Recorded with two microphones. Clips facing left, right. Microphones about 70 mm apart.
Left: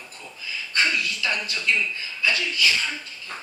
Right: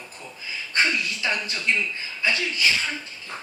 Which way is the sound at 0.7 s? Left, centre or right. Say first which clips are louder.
Right 1 dB; right.